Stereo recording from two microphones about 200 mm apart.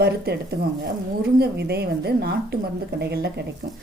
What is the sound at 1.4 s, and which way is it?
A woman's voice, 55° right (ahead or behind).